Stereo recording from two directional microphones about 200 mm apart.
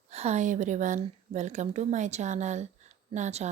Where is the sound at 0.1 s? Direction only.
30° right (ahead or behind).